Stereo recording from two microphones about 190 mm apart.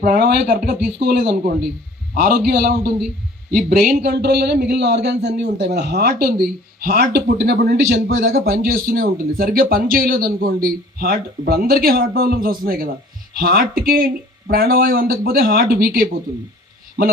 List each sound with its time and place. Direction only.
0.0 s a man's voice: 55° right (ahead or behind)